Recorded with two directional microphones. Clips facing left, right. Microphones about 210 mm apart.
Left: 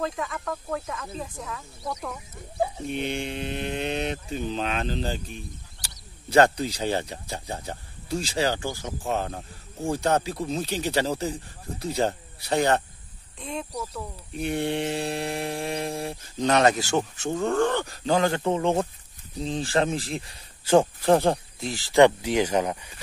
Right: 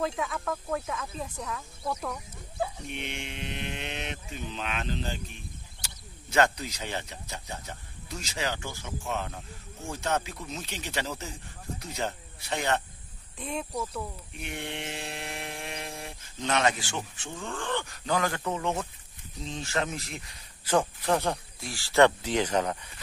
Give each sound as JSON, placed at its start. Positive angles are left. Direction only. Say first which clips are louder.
{"t": 0.0, "sound": "speech", "louder": "left 1 dB", "side_deg": 0}
{"t": 2.9, "sound": "mantra", "louder": "left 9 dB", "side_deg": 35}
{"t": 13.4, "sound": "speech", "louder": "even", "side_deg": 0}
{"t": 14.3, "sound": "mantra", "louder": "left 13 dB", "side_deg": 35}
{"t": 19.3, "sound": "speech", "louder": "left 7 dB", "side_deg": 35}